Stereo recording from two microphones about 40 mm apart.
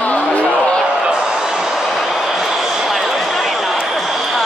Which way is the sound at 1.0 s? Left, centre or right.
Centre.